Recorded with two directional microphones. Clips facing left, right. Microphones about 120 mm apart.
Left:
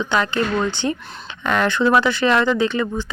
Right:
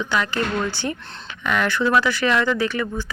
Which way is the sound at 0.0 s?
25° left (ahead or behind).